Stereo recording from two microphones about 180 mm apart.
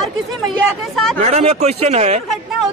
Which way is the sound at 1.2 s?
40° right (ahead or behind).